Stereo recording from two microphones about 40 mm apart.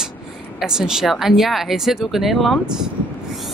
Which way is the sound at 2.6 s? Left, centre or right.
Centre.